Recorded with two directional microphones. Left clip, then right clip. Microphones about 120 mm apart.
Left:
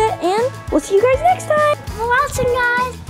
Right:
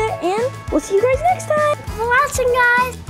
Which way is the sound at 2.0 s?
Centre (ahead or behind).